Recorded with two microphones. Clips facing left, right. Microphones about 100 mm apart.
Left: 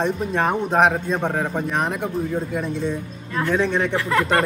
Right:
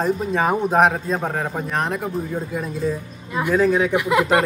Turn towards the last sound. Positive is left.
turn(degrees=-15)  # may be behind; listen again after turning